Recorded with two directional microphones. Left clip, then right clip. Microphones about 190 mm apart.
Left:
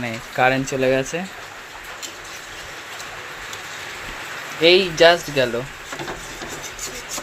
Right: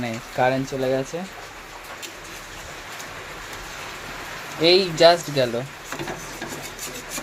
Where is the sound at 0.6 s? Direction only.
20° left (ahead or behind).